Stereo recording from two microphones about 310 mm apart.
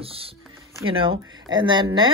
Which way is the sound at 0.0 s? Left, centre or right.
Centre.